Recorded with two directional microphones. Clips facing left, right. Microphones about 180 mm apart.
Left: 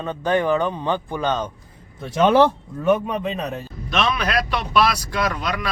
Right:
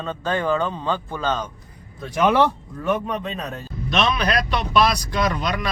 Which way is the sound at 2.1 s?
25° left (ahead or behind).